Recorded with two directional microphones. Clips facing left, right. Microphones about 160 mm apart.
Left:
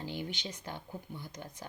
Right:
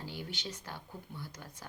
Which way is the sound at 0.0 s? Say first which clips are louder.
Left 3 dB; 20° left (ahead or behind).